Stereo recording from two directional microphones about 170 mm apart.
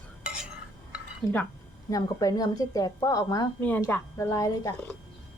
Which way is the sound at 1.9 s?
20° left (ahead or behind).